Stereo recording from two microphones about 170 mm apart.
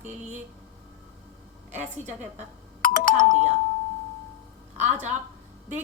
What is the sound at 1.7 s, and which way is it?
Speech, 45° right (ahead or behind).